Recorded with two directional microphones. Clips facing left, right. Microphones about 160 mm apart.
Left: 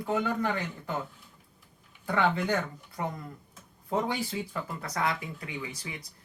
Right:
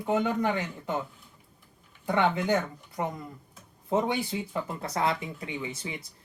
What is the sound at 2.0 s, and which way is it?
Speech, 20° right (ahead or behind).